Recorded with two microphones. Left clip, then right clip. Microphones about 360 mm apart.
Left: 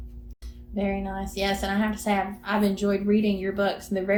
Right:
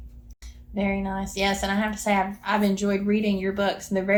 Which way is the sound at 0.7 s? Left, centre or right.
Centre.